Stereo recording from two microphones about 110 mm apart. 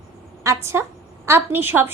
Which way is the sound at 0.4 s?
25° right (ahead or behind).